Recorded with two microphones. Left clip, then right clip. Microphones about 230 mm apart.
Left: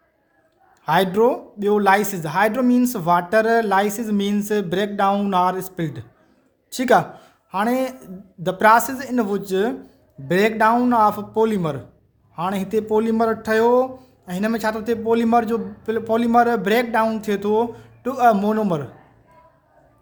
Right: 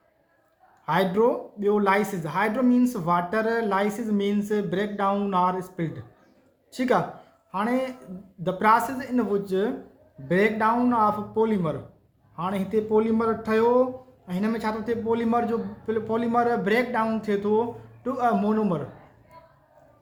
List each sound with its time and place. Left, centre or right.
0.9 s a man's voice: left